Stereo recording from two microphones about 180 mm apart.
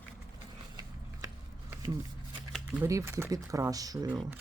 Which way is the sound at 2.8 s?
15° right (ahead or behind).